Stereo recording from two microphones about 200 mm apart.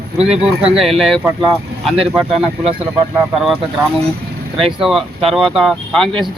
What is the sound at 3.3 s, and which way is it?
Speech, centre (ahead or behind).